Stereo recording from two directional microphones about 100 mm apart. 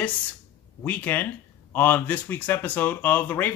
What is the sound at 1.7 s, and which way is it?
Speech, 20° left (ahead or behind).